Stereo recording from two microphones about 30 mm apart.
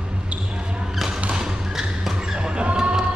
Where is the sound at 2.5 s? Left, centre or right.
Right.